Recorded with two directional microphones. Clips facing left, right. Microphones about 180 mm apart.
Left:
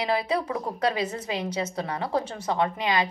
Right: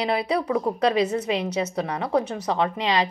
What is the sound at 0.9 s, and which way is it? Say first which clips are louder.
Speech: right 7 dB; 20° right (ahead or behind).